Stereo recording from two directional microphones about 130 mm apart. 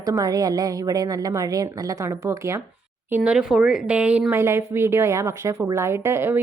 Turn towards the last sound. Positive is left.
turn(degrees=-20)  # may be behind; listen again after turning